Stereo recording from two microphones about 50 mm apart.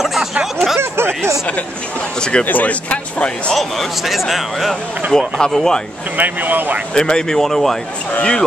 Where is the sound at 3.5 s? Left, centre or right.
Centre.